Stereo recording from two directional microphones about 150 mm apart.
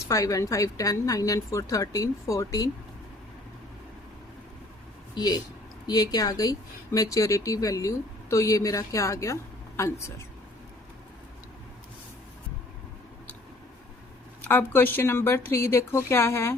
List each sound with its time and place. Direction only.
0.1 s speech: 20° left (ahead or behind)
5.1 s speech: 25° left (ahead or behind)
14.4 s a woman's voice: 15° left (ahead or behind)